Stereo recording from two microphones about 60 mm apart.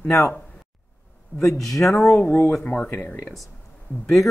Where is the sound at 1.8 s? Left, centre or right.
Centre.